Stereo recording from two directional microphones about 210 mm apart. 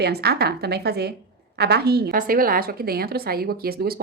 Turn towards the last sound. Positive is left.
turn(degrees=-45)  # may be behind; listen again after turning